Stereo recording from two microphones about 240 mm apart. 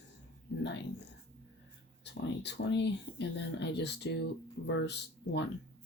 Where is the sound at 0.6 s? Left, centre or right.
Left.